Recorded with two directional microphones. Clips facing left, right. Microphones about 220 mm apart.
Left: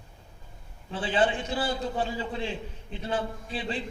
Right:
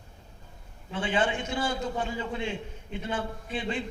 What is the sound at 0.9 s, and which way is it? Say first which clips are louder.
A man's voice: left 2 dB; 30° left (ahead or behind).